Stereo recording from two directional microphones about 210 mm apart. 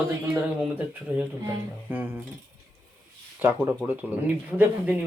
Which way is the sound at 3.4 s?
10° right (ahead or behind).